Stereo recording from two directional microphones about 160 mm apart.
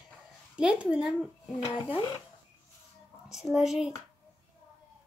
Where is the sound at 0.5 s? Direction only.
5° right (ahead or behind).